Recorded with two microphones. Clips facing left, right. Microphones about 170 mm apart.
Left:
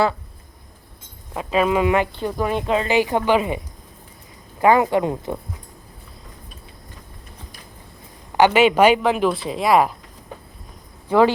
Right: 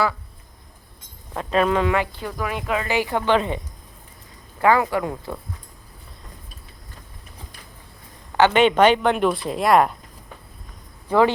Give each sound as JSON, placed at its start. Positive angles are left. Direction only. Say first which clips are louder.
{"t": 1.3, "sound": "speech", "louder": "left 1 dB", "side_deg": 5}
{"t": 4.6, "sound": "speech", "louder": "left 3 dB", "side_deg": 20}
{"t": 8.4, "sound": "speech", "louder": "left 1 dB", "side_deg": 10}